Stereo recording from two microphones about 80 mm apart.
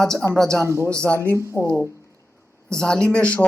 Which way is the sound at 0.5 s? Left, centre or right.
Right.